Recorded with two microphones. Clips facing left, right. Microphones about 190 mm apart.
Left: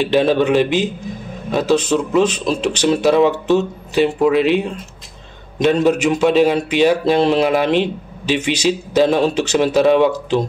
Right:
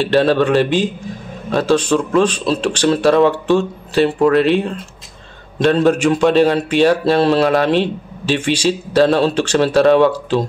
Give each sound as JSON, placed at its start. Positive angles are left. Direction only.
{"t": 0.0, "sound": "a man's voice", "side_deg": 15}